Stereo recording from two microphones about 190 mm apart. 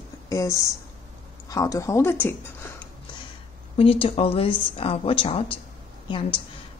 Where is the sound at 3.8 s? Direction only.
30° left (ahead or behind).